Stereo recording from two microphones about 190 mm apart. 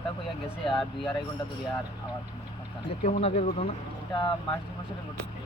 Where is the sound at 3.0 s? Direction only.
35° left (ahead or behind).